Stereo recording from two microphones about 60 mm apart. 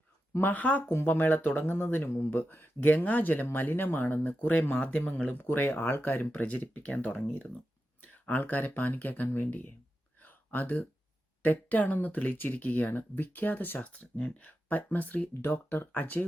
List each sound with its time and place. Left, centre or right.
0.5 s speech: left
0.9 s speech: left
1.1 s speech: left
10.2 s a sound: left
11.4 s speech: left
15.3 s speech: left